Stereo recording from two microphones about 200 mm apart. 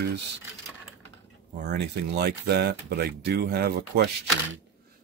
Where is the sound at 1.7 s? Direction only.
55° right (ahead or behind).